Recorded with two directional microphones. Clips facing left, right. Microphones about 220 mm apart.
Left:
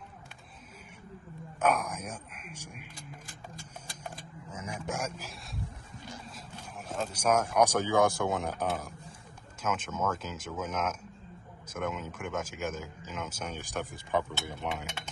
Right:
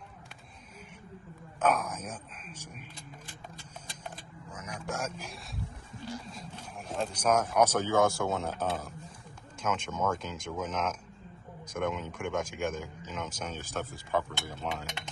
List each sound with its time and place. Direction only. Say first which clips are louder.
1.6 s speech: even; 10° left (ahead or behind)
3.5 s a sound: left 1 dB; 10° left (ahead or behind)
4.5 s speech: left 1 dB; 25° left (ahead or behind)
6.3 s speech: right 1 dB; centre (ahead or behind)